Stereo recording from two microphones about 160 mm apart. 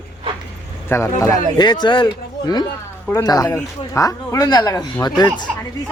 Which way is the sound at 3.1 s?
25° left (ahead or behind).